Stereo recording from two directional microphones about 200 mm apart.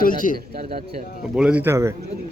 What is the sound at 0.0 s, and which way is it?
Speech, 40° left (ahead or behind).